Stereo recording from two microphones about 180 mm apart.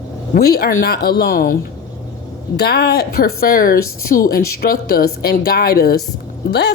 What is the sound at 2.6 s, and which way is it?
A woman's voice, 60° left (ahead or behind).